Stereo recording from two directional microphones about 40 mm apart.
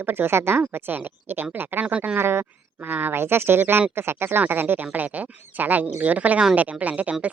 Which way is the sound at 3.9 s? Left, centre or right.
Right.